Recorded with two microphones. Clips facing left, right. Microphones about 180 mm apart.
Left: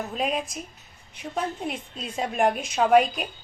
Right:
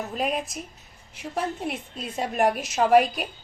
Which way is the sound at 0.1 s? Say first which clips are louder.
Even; centre (ahead or behind).